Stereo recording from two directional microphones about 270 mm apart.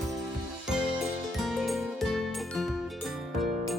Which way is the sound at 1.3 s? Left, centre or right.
Centre.